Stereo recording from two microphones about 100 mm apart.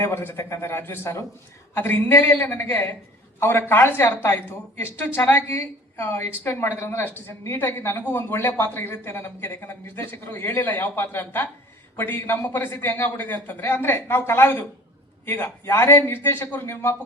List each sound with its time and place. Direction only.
0.0 s a woman's voice: 20° left (ahead or behind)